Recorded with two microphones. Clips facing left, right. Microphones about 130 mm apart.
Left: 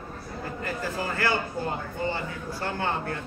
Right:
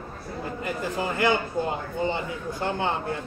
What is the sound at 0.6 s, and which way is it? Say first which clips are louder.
A man's voice: right 2 dB; 20° right (ahead or behind).